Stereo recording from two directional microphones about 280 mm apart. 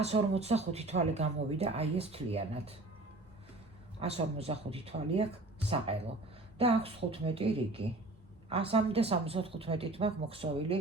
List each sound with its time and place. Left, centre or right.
0.0 s speech: right
4.0 s speech: right